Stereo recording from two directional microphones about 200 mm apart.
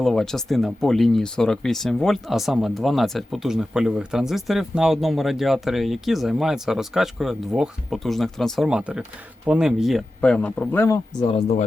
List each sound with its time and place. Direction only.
0.0 s speech: centre (ahead or behind)
11.3 s speech: 35° left (ahead or behind)